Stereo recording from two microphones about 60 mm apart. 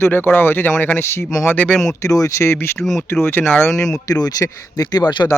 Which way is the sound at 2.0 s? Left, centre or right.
Left.